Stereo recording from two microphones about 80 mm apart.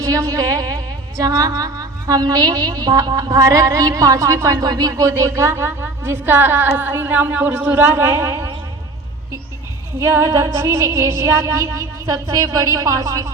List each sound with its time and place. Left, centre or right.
0.0 s a woman's voice: right
10.0 s music: right